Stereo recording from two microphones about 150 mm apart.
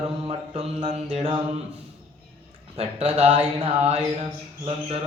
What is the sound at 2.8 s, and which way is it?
Mantra, 40° right (ahead or behind).